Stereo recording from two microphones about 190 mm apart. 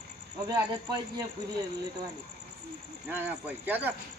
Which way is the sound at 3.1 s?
10° right (ahead or behind).